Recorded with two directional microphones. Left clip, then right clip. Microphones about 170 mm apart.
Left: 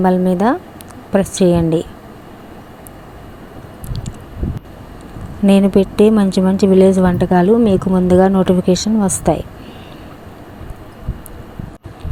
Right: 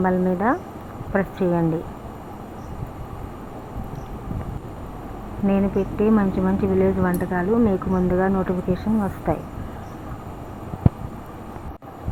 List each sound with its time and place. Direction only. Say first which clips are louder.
0.0 s speech: left 7 dB; 55° left (ahead or behind)
5.5 s speech: left 10 dB; 90° left; by 6.7 s 60° left (ahead or behind)
6.7 s speech: left 10 dB; 70° left (ahead or behind)
7.5 s speech: left 7 dB; 50° left (ahead or behind)